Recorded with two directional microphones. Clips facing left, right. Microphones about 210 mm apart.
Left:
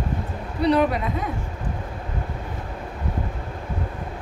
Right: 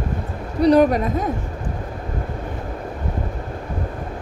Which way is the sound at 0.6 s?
40° right (ahead or behind).